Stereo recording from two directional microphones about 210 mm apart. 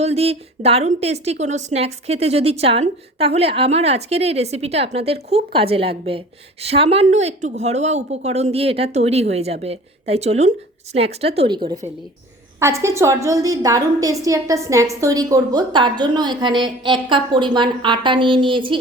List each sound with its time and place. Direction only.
0.0 s a woman's voice: 30° right (ahead or behind)